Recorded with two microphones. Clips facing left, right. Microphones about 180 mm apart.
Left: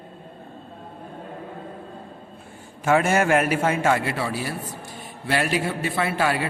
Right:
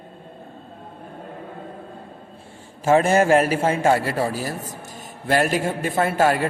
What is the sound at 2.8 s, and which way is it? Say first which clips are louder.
A man's voice: right 3 dB; 35° right (ahead or behind).